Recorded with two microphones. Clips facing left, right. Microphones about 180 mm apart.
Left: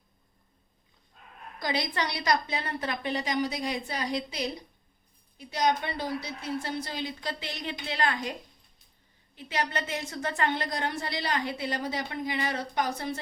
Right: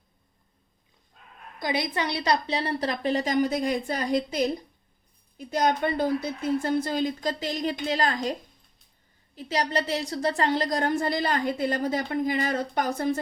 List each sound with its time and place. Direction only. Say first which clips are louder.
1.5 s a woman's voice: right 3 dB; 20° right (ahead or behind); by 13.1 s 50° right (ahead or behind)